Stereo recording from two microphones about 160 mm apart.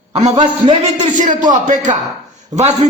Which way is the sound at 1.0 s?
50° right (ahead or behind).